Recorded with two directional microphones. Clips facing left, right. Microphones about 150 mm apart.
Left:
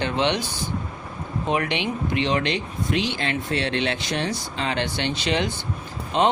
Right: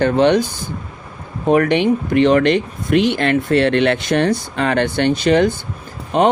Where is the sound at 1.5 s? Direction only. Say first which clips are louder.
Right 11 dB; 50° right (ahead or behind).